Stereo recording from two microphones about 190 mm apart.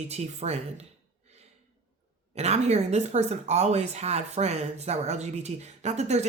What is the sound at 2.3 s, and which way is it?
Speech, 35° right (ahead or behind).